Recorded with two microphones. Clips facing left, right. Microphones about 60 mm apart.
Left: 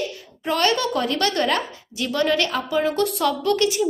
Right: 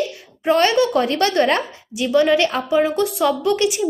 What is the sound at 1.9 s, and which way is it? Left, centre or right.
A woman's voice, centre.